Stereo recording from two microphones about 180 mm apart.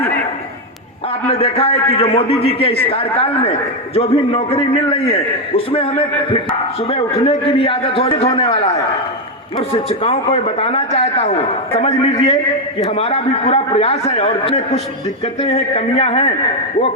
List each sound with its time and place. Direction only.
1.3 s a man's voice: 35° left (ahead or behind)
9.6 s a man's voice: 30° left (ahead or behind)